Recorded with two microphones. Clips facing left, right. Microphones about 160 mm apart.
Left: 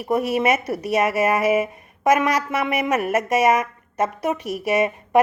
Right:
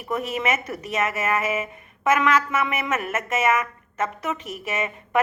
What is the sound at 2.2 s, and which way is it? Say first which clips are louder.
A woman's voice: even; 35° left (ahead or behind).